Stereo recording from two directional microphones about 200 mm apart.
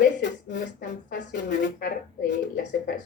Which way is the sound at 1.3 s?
50° left (ahead or behind).